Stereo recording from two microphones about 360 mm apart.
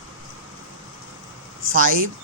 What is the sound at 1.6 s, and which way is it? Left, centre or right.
Speech, right.